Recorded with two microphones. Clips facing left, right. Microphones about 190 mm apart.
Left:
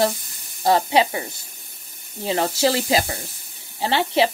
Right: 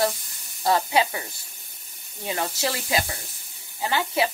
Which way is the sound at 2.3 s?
30° left (ahead or behind).